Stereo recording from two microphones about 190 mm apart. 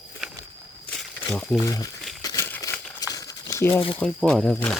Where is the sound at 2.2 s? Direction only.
15° left (ahead or behind).